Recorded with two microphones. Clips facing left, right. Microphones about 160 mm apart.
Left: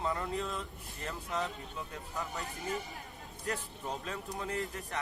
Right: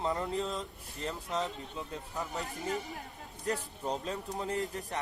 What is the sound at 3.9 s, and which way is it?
Speech, 35° right (ahead or behind).